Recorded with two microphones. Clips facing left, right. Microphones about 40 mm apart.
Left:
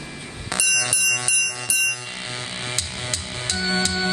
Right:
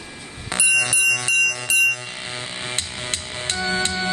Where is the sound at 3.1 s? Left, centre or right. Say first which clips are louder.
Right 2 dB; right.